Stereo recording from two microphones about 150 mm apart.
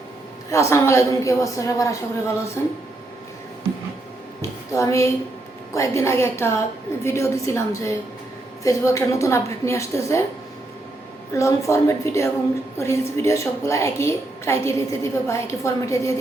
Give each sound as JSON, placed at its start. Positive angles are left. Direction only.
{"t": 0.5, "sound": "a woman's voice", "side_deg": 20}
{"t": 4.4, "sound": "a sound", "side_deg": 20}
{"t": 5.7, "sound": "a woman's voice", "side_deg": 20}
{"t": 11.3, "sound": "a woman's voice", "side_deg": 20}